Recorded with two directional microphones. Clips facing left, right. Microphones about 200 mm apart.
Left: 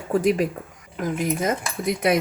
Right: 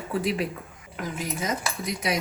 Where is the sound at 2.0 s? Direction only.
55° left (ahead or behind).